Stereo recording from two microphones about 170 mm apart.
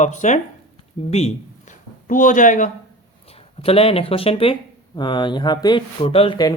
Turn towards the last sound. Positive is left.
turn(degrees=25)  # may be behind; listen again after turning